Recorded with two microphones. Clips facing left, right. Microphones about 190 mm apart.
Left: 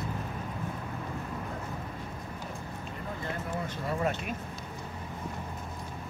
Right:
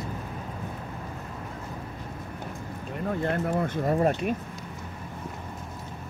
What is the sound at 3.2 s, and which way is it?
Speech, 60° right (ahead or behind).